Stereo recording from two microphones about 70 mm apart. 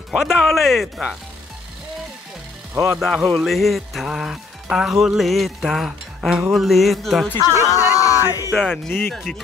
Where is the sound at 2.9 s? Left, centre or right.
Centre.